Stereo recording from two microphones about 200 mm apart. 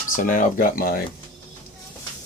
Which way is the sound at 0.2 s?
40° left (ahead or behind).